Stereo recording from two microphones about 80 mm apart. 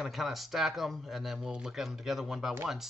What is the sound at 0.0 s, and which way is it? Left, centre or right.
Speech, centre.